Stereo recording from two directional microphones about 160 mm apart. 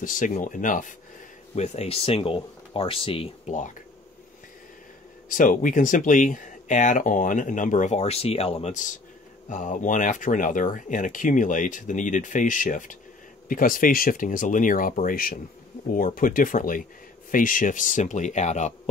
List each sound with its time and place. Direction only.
0.0 s speech: 55° left (ahead or behind)
1.5 s speech: 40° left (ahead or behind)
3.4 s speech: 50° left (ahead or behind)
5.3 s speech: 55° left (ahead or behind)